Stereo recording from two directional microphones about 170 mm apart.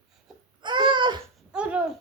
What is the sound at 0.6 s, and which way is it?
Babbling, 25° right (ahead or behind).